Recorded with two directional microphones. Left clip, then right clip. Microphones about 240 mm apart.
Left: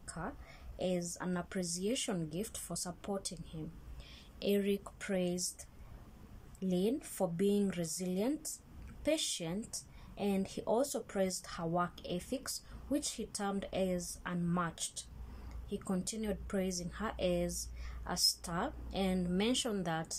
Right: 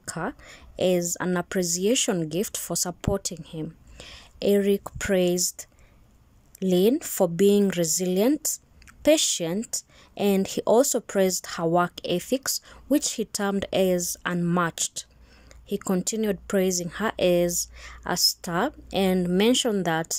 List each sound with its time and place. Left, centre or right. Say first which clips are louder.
0.0 s a woman's voice: right 13 dB; right